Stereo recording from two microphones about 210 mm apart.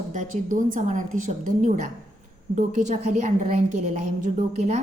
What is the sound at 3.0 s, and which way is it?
Speech, 35° right (ahead or behind).